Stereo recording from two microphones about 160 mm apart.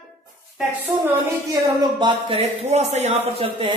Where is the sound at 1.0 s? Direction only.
25° right (ahead or behind).